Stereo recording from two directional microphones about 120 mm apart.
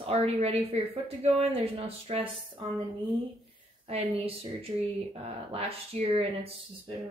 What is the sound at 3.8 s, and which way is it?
Speech, 55° right (ahead or behind).